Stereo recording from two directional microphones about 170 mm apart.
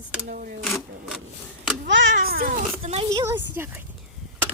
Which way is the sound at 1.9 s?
90° right.